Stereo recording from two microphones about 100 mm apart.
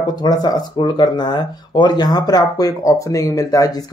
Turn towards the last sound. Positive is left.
turn(degrees=35)  # may be behind; listen again after turning